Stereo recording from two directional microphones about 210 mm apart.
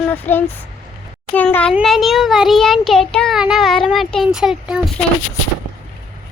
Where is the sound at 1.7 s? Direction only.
Centre (ahead or behind).